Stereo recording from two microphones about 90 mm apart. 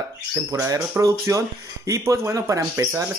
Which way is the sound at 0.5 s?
40° right (ahead or behind).